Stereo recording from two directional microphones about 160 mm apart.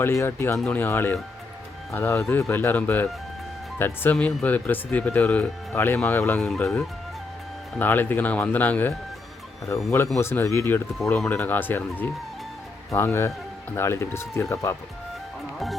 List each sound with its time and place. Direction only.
0.0 s speech: 15° left (ahead or behind)
2.2 s speech: centre (ahead or behind)
2.5 s speech: 10° left (ahead or behind)
7.8 s speech: 10° left (ahead or behind)
10.2 s speech: 15° left (ahead or behind)
15.5 s music: centre (ahead or behind)